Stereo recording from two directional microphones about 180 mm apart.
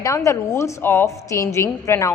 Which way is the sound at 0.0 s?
20° left (ahead or behind).